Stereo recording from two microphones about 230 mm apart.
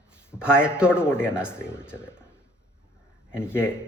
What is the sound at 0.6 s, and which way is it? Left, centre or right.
Speech, centre.